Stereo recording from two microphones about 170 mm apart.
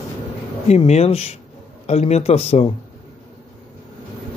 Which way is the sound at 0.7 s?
40° left (ahead or behind).